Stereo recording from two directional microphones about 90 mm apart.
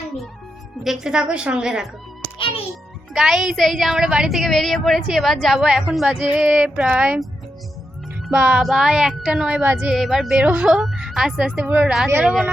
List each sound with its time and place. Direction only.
0.9 s speech: 10° right (ahead or behind)
3.1 s a woman's voice: 5° right (ahead or behind)
8.3 s a woman's voice: 10° right (ahead or behind)
11.6 s speech: 20° right (ahead or behind)
12.2 s a woman's voice: centre (ahead or behind)